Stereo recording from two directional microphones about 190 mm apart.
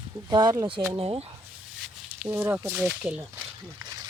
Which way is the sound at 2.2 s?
10° right (ahead or behind).